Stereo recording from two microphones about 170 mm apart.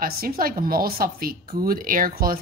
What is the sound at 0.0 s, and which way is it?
Speech, 60° right (ahead or behind).